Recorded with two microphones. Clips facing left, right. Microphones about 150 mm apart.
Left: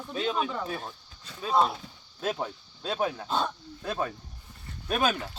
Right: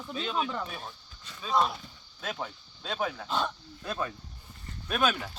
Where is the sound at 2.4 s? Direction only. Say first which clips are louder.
Left 4 dB; 35° left (ahead or behind).